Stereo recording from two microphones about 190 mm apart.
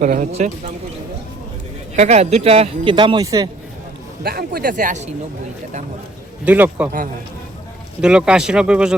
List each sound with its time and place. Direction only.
0.0 s speech: 40° right (ahead or behind)
2.0 s speech: 35° right (ahead or behind)
4.2 s speech: 55° right (ahead or behind)
6.4 s a man's voice: 10° right (ahead or behind)
8.0 s speech: 5° right (ahead or behind)